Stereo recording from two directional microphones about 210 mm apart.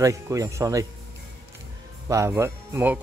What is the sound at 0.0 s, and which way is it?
Speech, 15° right (ahead or behind).